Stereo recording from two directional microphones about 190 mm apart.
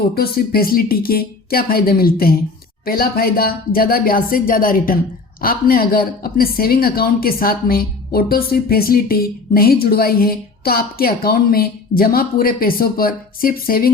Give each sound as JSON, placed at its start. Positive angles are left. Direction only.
{"t": 0.1, "sound": "speech", "side_deg": 50}